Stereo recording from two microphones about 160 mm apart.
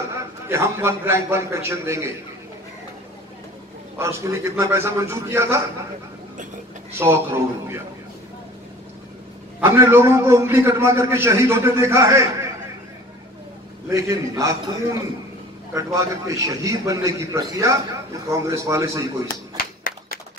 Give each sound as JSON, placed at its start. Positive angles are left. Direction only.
{"t": 0.1, "sound": "a man's voice", "side_deg": -15}
{"t": 4.0, "sound": "a man's voice", "side_deg": -15}
{"t": 7.0, "sound": "a man's voice", "side_deg": -15}
{"t": 9.6, "sound": "a man's voice", "side_deg": -15}
{"t": 13.8, "sound": "a man's voice", "side_deg": -20}
{"t": 19.2, "sound": "a sound", "side_deg": 60}